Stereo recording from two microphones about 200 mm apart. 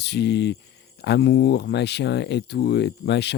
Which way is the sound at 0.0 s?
60° left (ahead or behind).